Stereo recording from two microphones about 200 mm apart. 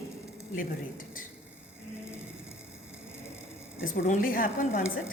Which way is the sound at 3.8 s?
40° left (ahead or behind).